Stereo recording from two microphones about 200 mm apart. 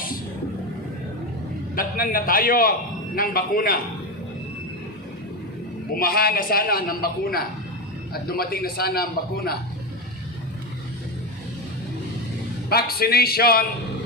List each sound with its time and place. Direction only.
1.7 s a man's voice: 45° left (ahead or behind)
5.9 s a man's voice: 50° left (ahead or behind)
12.6 s a man's voice: 50° left (ahead or behind)